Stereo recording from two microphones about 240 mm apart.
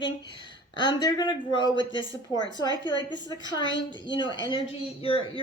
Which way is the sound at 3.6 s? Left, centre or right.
Left.